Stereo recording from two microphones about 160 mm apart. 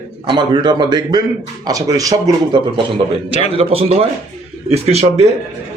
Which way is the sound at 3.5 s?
35° right (ahead or behind).